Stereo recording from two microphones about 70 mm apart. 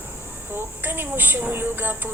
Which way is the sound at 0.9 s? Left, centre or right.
Right.